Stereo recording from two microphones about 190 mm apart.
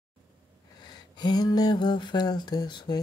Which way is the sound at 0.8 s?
25° left (ahead or behind).